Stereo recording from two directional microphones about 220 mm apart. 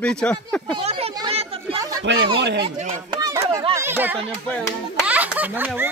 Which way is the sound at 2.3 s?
50° right (ahead or behind).